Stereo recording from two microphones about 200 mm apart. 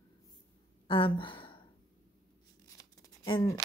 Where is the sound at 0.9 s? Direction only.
25° left (ahead or behind).